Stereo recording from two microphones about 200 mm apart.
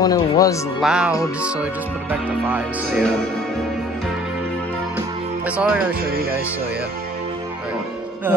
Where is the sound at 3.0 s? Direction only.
Centre (ahead or behind).